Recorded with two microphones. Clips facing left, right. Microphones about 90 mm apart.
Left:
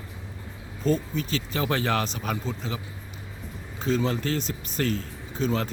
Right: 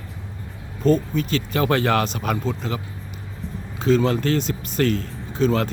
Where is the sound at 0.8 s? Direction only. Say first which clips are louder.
Right 6 dB; 60° right (ahead or behind).